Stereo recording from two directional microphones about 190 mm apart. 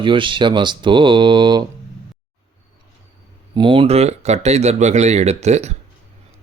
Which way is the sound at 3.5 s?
25° right (ahead or behind).